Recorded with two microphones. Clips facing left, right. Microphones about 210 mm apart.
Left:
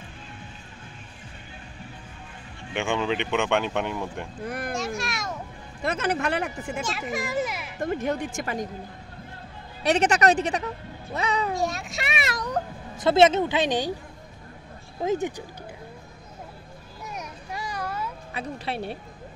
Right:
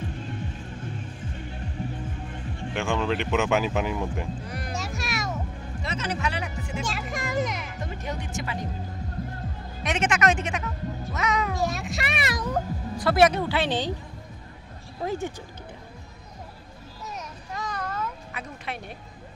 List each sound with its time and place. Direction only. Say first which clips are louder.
2.7 s speech: left 1 dB; centre (ahead or behind)
4.5 s a sound: left 4 dB; 55° left (ahead or behind)
4.7 s music: left 2 dB; centre (ahead or behind)
5.8 s speech: left 5 dB; 55° left (ahead or behind)
6.8 s speech: left 2 dB; centre (ahead or behind)
7.8 s speech: left 11 dB; 55° left (ahead or behind)
9.8 s speech: left 4 dB; 35° left (ahead or behind)
11.5 s a child's voice: even; centre (ahead or behind)
12.9 s speech: left 2 dB; 25° left (ahead or behind)
15.0 s speech: left 4 dB; 15° left (ahead or behind)
17.1 s a sound: left 1 dB; 10° left (ahead or behind)
18.3 s speech: left 5 dB; 30° left (ahead or behind)